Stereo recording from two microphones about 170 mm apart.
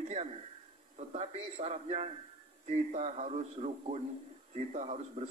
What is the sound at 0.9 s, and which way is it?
A man's voice, 40° right (ahead or behind).